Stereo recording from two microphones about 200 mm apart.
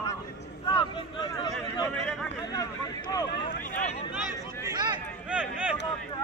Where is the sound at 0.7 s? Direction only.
25° left (ahead or behind).